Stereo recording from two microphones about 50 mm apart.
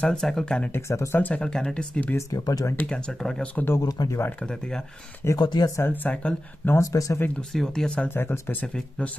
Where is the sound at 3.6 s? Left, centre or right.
Left.